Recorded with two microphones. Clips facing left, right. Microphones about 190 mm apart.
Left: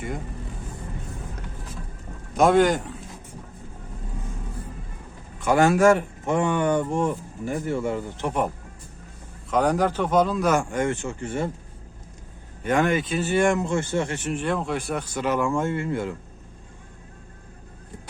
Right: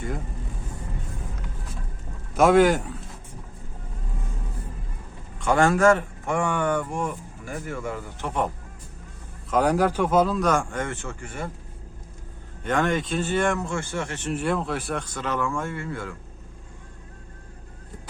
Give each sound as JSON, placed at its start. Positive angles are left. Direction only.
{"t": 2.3, "sound": "speech", "side_deg": -5}
{"t": 5.4, "sound": "speech", "side_deg": 10}
{"t": 6.2, "sound": "speech", "side_deg": 20}
{"t": 9.5, "sound": "a man's voice", "side_deg": -5}
{"t": 12.6, "sound": "speech", "side_deg": 10}
{"t": 14.3, "sound": "a man's voice", "side_deg": -5}
{"t": 15.4, "sound": "speech", "side_deg": 20}